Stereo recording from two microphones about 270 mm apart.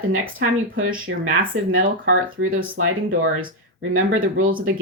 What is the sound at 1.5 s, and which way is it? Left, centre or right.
Speech, right.